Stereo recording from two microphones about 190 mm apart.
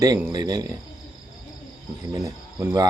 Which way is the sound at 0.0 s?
20° right (ahead or behind).